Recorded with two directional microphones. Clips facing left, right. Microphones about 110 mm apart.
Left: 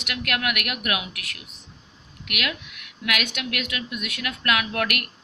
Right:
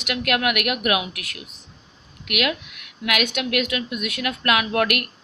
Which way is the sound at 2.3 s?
15° right (ahead or behind).